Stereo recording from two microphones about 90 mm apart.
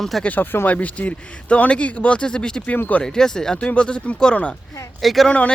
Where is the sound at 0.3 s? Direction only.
20° left (ahead or behind).